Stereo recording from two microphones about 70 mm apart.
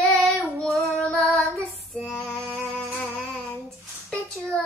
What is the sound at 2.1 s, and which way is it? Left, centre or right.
Child singing, centre.